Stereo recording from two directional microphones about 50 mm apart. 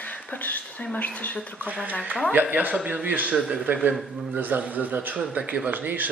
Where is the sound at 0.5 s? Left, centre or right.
Left.